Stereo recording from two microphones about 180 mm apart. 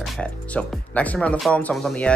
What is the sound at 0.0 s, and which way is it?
Speech, 5° left (ahead or behind).